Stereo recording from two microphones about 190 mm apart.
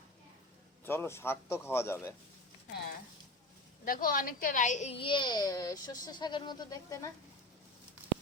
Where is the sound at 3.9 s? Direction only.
50° left (ahead or behind); by 7.1 s 20° left (ahead or behind).